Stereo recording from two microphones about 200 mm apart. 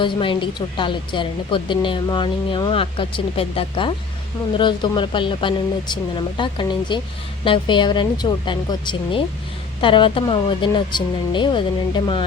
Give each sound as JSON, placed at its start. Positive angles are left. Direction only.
{"t": 0.0, "sound": "speech", "side_deg": 25}